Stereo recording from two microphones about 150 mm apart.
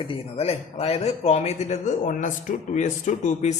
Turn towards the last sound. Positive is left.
turn(degrees=55)  # may be behind; listen again after turning